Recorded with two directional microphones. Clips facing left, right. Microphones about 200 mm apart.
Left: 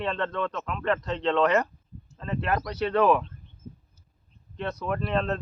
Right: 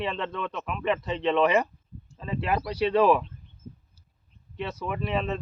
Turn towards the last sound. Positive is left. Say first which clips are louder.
# left 2 dB
turn(degrees=-5)  # may be behind; listen again after turning